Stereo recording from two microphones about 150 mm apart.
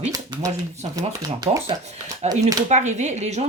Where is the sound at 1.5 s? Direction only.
30° right (ahead or behind).